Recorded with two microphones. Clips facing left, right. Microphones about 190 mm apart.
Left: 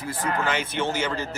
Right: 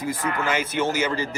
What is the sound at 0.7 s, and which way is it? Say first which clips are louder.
Speech: right 3 dB; 10° right (ahead or behind).